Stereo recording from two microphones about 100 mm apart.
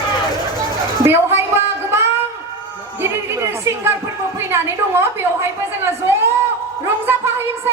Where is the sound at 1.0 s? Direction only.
25° right (ahead or behind).